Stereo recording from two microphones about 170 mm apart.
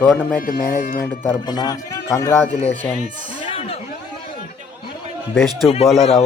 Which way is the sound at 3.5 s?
35° left (ahead or behind).